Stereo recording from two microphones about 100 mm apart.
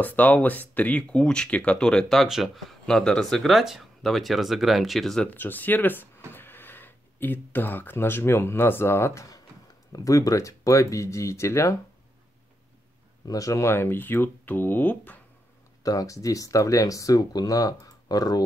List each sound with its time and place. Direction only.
0.0 s speech: 15° left (ahead or behind)
5.3 s speech: 20° left (ahead or behind)
13.2 s speech: 35° left (ahead or behind); by 15.1 s 15° left (ahead or behind)
15.8 s speech: 35° left (ahead or behind)